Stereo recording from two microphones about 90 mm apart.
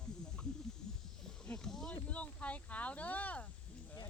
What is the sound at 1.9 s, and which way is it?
Speech, 15° left (ahead or behind).